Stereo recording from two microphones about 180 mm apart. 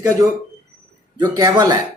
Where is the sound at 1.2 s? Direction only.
20° right (ahead or behind).